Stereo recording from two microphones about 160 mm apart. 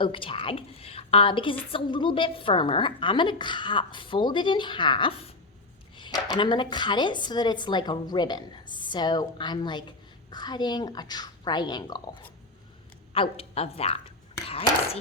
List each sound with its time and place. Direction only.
0.0 s a woman's voice: 35° left (ahead or behind)
13.1 s a woman's voice: 35° left (ahead or behind)